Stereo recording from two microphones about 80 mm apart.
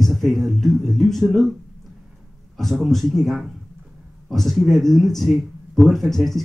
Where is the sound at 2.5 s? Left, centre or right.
Centre.